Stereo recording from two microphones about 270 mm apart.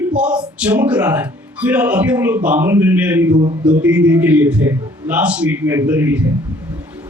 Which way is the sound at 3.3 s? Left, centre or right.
Centre.